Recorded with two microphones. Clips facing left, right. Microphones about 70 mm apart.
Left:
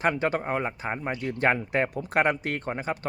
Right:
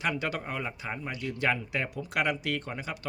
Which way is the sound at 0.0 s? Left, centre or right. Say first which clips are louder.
Left 6 dB; left.